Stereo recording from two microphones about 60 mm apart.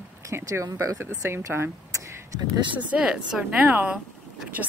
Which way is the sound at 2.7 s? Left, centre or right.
Centre.